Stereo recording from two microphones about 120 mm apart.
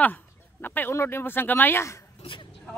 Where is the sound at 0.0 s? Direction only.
15° left (ahead or behind).